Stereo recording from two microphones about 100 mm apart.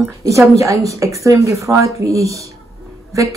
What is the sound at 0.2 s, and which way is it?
Speech, 30° right (ahead or behind).